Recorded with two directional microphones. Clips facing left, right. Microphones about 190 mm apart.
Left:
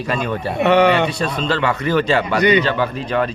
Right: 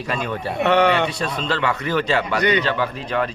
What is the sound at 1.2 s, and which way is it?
A man's voice, 35° left (ahead or behind).